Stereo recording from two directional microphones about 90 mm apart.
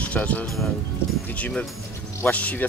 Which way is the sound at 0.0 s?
15° left (ahead or behind).